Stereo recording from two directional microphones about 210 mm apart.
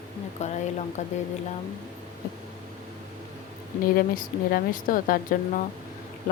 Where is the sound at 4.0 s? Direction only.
40° left (ahead or behind).